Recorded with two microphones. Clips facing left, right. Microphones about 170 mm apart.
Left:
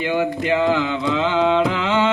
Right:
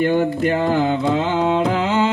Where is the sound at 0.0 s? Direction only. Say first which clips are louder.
Right 4 dB; 50° right (ahead or behind).